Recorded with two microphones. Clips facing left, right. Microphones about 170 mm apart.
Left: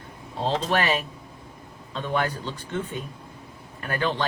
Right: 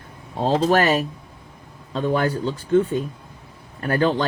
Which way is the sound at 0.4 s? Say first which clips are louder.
Right 6 dB; 45° right (ahead or behind).